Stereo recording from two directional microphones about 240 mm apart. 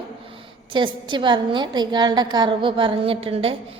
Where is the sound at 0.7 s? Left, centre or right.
Centre.